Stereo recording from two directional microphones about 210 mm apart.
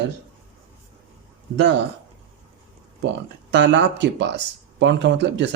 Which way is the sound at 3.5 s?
55° right (ahead or behind).